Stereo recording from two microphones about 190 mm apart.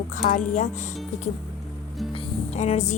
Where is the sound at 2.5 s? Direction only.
35° left (ahead or behind).